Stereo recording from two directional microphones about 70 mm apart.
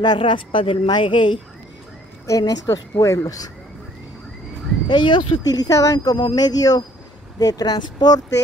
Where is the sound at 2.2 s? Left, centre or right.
Left.